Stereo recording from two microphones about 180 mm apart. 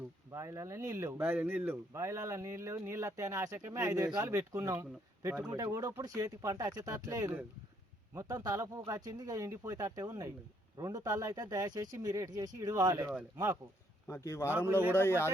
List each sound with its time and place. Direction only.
0.3 s speech: 15° right (ahead or behind)
14.1 s speech: 15° left (ahead or behind)
14.7 s speech: 10° right (ahead or behind)
14.9 s speech: 15° left (ahead or behind)